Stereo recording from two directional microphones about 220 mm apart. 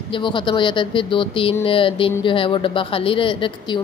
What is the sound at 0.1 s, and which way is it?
Speech, 20° left (ahead or behind).